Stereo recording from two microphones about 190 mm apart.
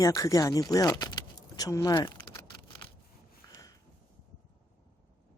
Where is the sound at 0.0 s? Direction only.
15° left (ahead or behind).